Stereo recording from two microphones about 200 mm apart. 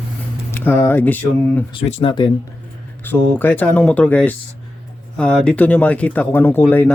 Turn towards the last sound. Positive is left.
turn(degrees=10)  # may be behind; listen again after turning